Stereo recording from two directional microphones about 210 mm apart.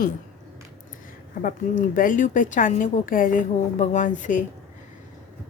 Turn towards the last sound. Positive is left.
turn(degrees=35)  # may be behind; listen again after turning